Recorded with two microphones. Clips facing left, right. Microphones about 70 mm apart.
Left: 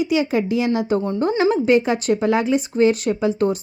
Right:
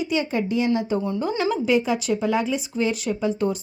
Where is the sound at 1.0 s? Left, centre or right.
Left.